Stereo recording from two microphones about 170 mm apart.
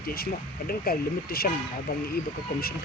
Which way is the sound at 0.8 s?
60° left (ahead or behind).